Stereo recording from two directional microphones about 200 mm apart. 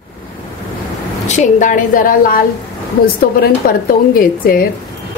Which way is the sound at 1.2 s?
35° left (ahead or behind).